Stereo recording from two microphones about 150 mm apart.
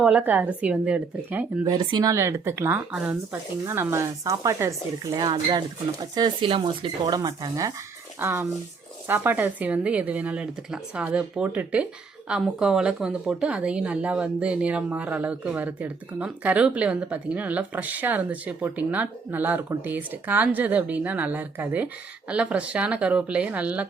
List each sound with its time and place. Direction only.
0.0 s a woman's voice: 10° right (ahead or behind)
1.6 s a woman's voice: 30° right (ahead or behind); by 23.9 s 10° right (ahead or behind)